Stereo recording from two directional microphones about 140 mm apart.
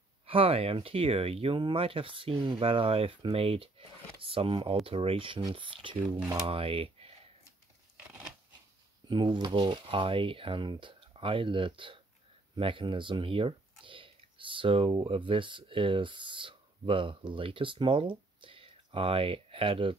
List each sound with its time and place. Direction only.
0.3 s speech: 45° right (ahead or behind)
9.1 s speech: 35° right (ahead or behind)